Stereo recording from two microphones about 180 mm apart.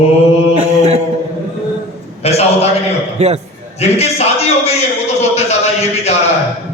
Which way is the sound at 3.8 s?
35° left (ahead or behind).